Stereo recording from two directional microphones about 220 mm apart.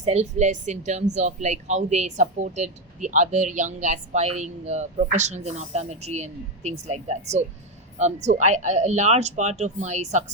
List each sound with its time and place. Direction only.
0.0 s speech: 30° right (ahead or behind)